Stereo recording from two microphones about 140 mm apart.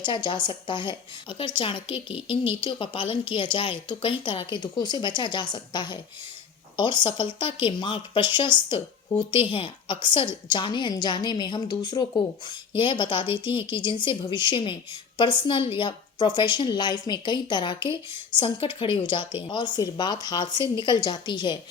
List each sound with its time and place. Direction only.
0.0 s a woman's voice: 35° left (ahead or behind)